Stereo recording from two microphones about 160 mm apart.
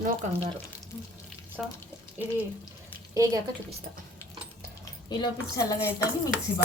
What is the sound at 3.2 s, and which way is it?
Speech, 20° right (ahead or behind).